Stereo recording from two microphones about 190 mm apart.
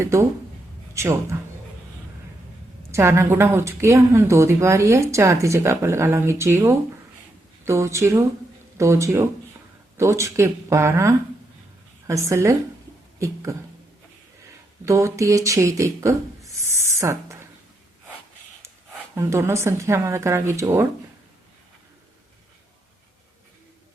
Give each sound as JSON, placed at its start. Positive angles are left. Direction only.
{"t": 0.0, "sound": "a woman's voice", "side_deg": -15}
{"t": 2.9, "sound": "a woman's voice", "side_deg": -15}
{"t": 13.1, "sound": "a sound", "side_deg": -15}
{"t": 14.8, "sound": "speech", "side_deg": -15}
{"t": 19.1, "sound": "a woman's voice", "side_deg": -15}